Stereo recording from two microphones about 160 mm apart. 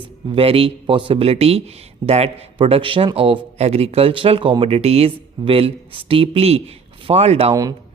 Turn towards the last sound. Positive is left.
turn(degrees=-25)  # may be behind; listen again after turning